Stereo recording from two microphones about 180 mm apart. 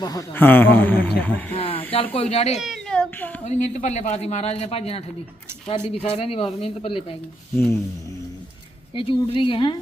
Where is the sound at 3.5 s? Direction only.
40° left (ahead or behind).